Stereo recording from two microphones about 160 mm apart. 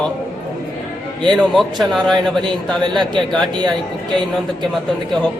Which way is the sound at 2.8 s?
30° right (ahead or behind).